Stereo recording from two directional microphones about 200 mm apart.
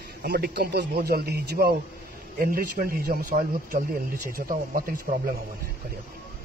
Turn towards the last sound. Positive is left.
turn(degrees=-45)  # may be behind; listen again after turning